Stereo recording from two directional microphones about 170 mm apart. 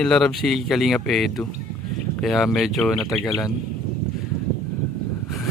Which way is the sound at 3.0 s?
20° left (ahead or behind).